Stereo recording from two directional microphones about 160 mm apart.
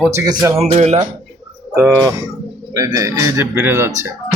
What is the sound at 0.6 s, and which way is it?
Speech, 40° right (ahead or behind).